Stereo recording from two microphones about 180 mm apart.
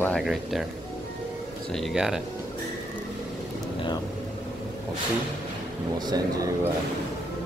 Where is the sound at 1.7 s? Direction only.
Centre (ahead or behind).